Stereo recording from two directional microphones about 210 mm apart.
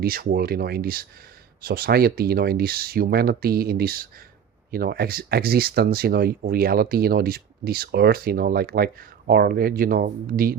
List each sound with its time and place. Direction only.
0.0 s speech: 45° right (ahead or behind)